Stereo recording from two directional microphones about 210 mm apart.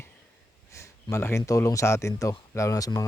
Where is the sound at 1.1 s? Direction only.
15° left (ahead or behind).